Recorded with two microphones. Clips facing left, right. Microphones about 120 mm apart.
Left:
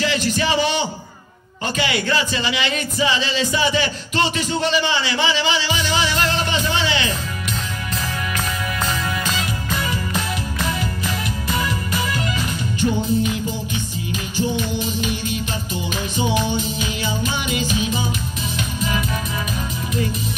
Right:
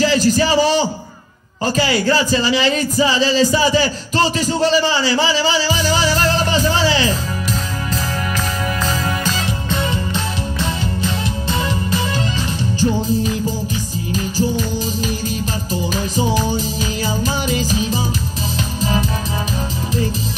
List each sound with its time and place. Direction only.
0.0 s a sound: 35° right (ahead or behind)
1.8 s music: 35° right (ahead or behind)
8.8 s music: 30° right (ahead or behind)